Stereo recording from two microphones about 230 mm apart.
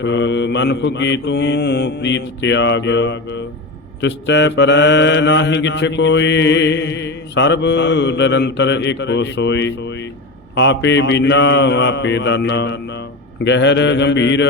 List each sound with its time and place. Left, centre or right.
0.0 s mantra: left